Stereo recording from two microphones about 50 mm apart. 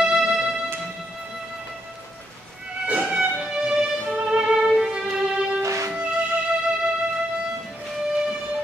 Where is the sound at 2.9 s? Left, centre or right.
Right.